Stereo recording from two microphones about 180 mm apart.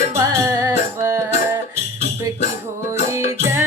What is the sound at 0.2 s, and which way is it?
Music, 15° right (ahead or behind).